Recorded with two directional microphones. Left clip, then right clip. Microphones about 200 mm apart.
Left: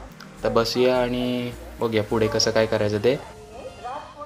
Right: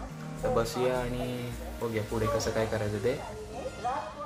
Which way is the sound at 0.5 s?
45° left (ahead or behind).